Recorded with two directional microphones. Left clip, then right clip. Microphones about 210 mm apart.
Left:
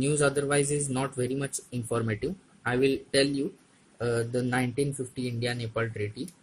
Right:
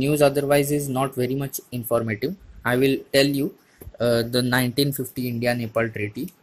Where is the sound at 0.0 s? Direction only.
15° right (ahead or behind).